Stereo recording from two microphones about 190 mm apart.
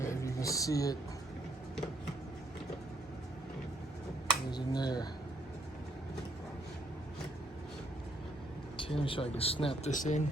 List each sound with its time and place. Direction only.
0.0 s a sound: 15° left (ahead or behind)
4.5 s computer keyboard: 20° left (ahead or behind)
8.7 s speech: 25° left (ahead or behind)
9.9 s speech: 40° left (ahead or behind)